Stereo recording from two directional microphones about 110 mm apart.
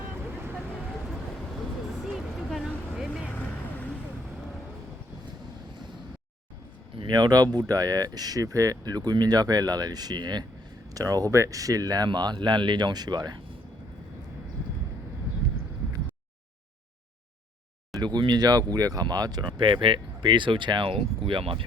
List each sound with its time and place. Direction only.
2.1 s a sound: centre (ahead or behind)
3.2 s vehicle: 15° left (ahead or behind)
6.9 s speech: 45° right (ahead or behind)
18.0 s speech: 40° right (ahead or behind)